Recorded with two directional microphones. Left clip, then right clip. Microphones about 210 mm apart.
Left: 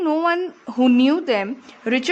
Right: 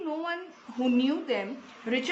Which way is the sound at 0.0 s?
55° left (ahead or behind).